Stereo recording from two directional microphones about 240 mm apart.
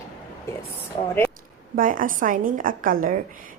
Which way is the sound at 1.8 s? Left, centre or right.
Right.